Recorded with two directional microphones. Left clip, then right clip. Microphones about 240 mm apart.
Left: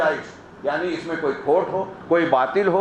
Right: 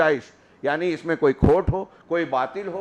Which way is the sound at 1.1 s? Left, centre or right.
Right.